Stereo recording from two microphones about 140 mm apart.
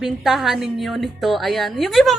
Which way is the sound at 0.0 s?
Centre (ahead or behind).